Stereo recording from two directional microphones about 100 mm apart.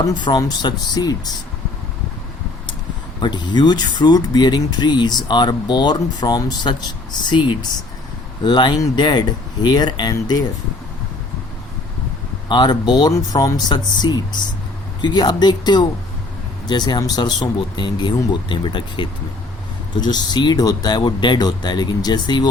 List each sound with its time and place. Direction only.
0.0 s speech: 45° left (ahead or behind)
3.2 s speech: 50° left (ahead or behind)
12.5 s speech: 50° left (ahead or behind)